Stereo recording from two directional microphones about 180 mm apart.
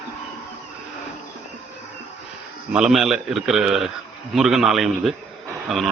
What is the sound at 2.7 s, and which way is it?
A man's voice, 5° right (ahead or behind).